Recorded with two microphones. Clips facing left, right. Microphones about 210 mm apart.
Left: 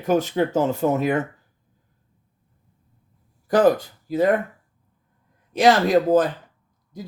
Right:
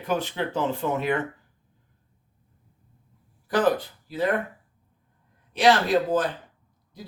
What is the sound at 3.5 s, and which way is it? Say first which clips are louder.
Speech: left 5 dB; 45° left (ahead or behind).